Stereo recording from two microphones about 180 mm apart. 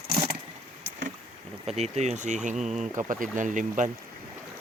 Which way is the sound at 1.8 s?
40° right (ahead or behind).